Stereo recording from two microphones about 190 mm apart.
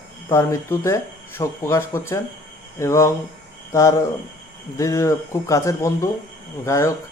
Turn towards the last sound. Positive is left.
turn(degrees=15)  # may be behind; listen again after turning